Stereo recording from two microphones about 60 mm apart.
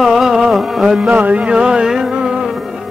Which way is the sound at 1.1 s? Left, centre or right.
Right.